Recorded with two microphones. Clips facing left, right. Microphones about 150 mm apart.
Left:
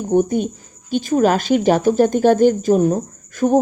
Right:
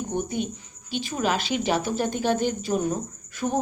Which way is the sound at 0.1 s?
45° left (ahead or behind).